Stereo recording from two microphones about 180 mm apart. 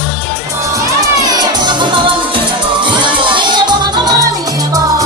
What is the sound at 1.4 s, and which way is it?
Music, 25° right (ahead or behind).